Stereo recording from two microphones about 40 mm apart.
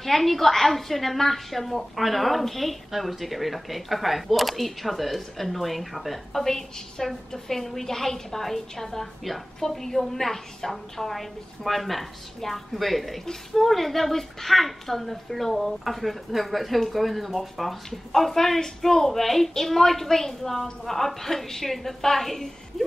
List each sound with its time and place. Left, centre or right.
0.0 s a woman's voice: centre